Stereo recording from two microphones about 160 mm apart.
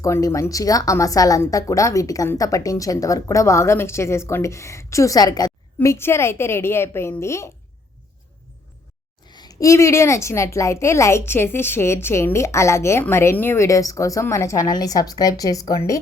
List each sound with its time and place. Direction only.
0.0 s a woman's voice: 20° left (ahead or behind)
9.3 s a woman's voice: 25° left (ahead or behind)